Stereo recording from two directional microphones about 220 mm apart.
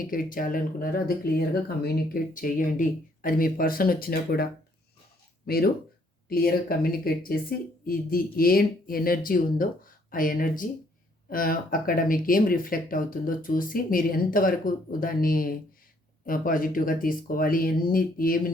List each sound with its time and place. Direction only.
0.0 s speech: 40° left (ahead or behind)
5.5 s speech: 45° left (ahead or behind)